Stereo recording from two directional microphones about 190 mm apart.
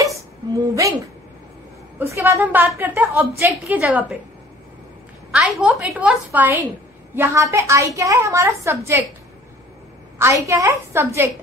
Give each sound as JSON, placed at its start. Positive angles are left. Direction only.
{"t": 0.6, "sound": "a sound", "side_deg": -15}
{"t": 2.0, "sound": "a woman's voice", "side_deg": -10}
{"t": 5.3, "sound": "a woman's voice", "side_deg": -5}
{"t": 10.1, "sound": "a woman's voice", "side_deg": -15}